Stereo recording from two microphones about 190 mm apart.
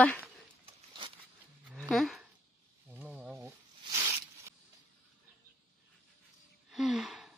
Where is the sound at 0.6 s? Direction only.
30° right (ahead or behind).